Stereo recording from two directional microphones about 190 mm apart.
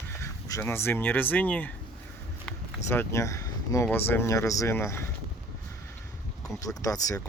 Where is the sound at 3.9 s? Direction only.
10° left (ahead or behind).